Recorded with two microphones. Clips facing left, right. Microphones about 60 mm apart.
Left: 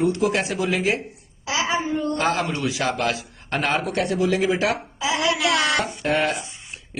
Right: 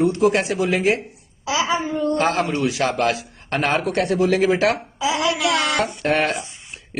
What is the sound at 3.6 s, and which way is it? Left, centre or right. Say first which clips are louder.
Speech: right 3 dB; right.